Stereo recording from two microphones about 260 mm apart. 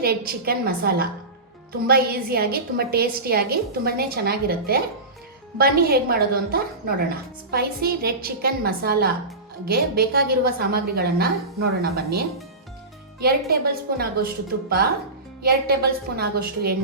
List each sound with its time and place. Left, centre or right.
0.0 s a woman's voice: right
13.5 s a woman's voice: right